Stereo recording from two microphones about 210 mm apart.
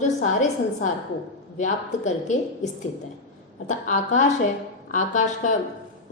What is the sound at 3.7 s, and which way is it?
A woman's voice, 35° left (ahead or behind).